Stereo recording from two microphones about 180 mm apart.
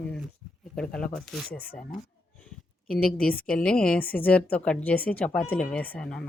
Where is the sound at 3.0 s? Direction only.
5° left (ahead or behind).